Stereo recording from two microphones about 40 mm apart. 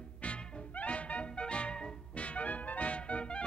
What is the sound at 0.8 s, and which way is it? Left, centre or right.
Music, left.